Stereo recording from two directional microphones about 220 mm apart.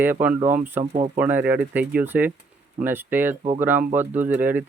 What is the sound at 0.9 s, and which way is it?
Speech, 30° right (ahead or behind).